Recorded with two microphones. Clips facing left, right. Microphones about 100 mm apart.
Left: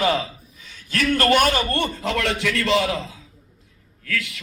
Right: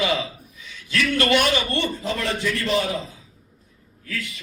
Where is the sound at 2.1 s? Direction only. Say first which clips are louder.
Left 3 dB; 85° left.